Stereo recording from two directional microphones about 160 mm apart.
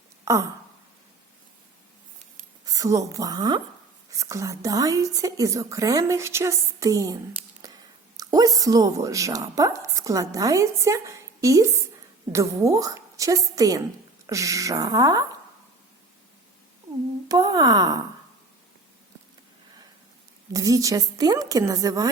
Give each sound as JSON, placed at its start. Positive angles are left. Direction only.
{"t": 0.3, "sound": "a woman's voice", "side_deg": -20}
{"t": 2.6, "sound": "a woman's voice", "side_deg": -20}
{"t": 7.6, "sound": "a sound", "side_deg": -20}
{"t": 8.1, "sound": "a woman's voice", "side_deg": -20}
{"t": 17.2, "sound": "a woman's voice", "side_deg": -25}
{"t": 20.5, "sound": "a woman's voice", "side_deg": -20}